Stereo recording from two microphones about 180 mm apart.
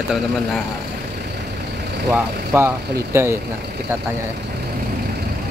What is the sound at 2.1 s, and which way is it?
Speech, 15° right (ahead or behind).